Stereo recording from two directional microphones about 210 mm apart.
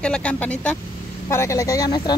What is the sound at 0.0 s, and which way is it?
Speech, 5° left (ahead or behind).